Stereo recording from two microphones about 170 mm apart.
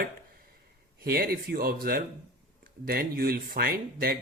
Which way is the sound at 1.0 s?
60° right (ahead or behind).